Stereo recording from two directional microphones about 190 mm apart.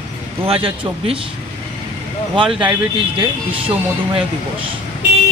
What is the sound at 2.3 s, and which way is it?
Speech, 25° right (ahead or behind).